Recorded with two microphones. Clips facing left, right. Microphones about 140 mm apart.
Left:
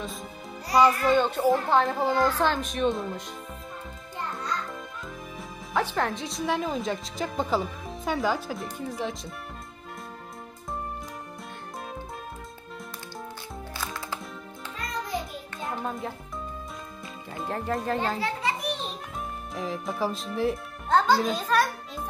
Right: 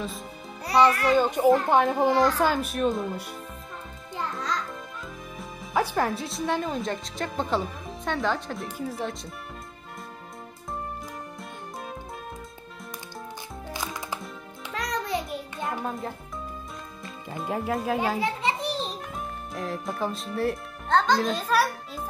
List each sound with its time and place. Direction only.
1.0 s a child's voice: 5° right (ahead or behind)
4.2 s music: 90° right
5.4 s speech: 5° right (ahead or behind)
14.7 s music: 85° right
15.7 s music: centre (ahead or behind)
17.4 s a child's voice: 5° right (ahead or behind)
18.4 s children playing: 25° right (ahead or behind)
19.1 s speech: centre (ahead or behind)